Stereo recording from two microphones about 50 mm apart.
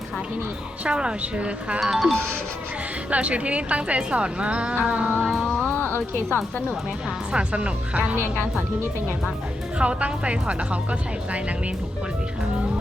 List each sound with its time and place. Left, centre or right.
0.9 s speech: centre
1.8 s speech: centre
3.1 s speech: right
5.6 s music: left
7.3 s speech: right
9.7 s speech: right